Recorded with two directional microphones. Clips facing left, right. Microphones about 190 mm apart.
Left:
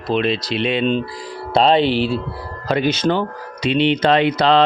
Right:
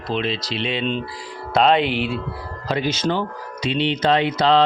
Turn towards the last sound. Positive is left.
turn(degrees=65)  # may be behind; listen again after turning